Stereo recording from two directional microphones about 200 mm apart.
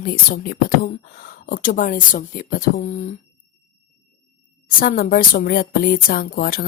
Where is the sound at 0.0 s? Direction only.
50° left (ahead or behind).